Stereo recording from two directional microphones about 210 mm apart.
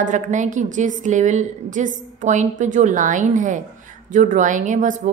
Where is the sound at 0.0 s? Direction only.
35° right (ahead or behind).